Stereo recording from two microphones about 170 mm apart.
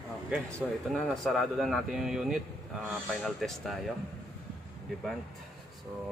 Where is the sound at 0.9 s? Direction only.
Centre (ahead or behind).